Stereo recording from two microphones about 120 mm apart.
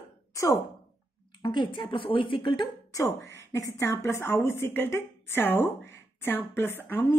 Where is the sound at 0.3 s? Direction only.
25° left (ahead or behind).